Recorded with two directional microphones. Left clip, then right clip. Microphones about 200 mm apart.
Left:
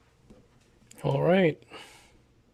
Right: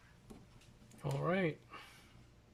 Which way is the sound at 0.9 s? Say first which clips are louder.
Left 13 dB; 45° left (ahead or behind).